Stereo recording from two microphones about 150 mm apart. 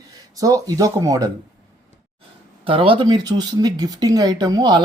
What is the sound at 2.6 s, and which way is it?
Speech, 35° right (ahead or behind).